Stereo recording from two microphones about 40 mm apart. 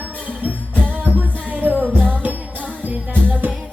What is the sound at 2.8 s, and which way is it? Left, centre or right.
Music, right.